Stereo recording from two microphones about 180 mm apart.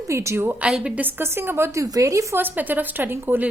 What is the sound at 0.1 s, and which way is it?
A woman's voice, 15° right (ahead or behind).